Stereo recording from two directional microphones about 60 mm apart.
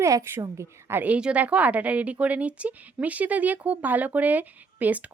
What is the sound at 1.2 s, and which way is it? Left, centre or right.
A woman's voice, centre.